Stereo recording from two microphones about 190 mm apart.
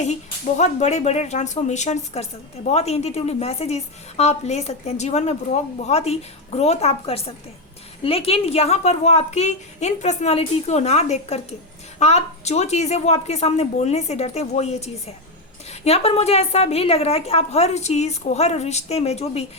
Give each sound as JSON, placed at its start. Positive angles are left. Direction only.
{"t": 0.0, "sound": "a woman's voice", "side_deg": 35}